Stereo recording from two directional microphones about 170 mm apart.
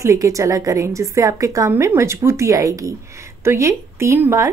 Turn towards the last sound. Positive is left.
turn(degrees=-15)  # may be behind; listen again after turning